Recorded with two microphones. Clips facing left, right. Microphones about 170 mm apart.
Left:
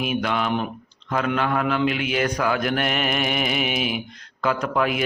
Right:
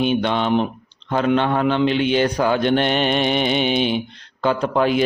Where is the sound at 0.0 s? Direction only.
30° right (ahead or behind).